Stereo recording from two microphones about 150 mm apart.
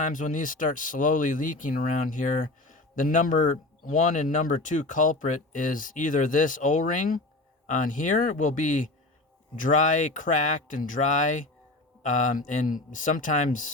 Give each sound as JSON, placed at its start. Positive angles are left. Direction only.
{"t": 0.0, "sound": "speech", "side_deg": 60}